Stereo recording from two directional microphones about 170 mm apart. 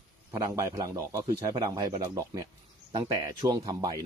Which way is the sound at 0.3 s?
15° right (ahead or behind).